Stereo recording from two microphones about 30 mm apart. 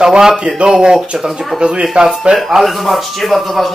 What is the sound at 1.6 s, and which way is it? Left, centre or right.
Speech, right.